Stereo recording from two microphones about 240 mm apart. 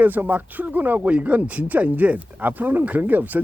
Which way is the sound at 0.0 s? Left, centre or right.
Centre.